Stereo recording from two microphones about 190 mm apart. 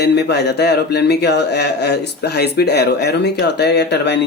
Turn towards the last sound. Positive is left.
turn(degrees=65)  # may be behind; listen again after turning